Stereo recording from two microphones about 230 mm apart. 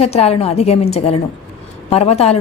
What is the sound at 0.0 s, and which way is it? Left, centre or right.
Speech, left.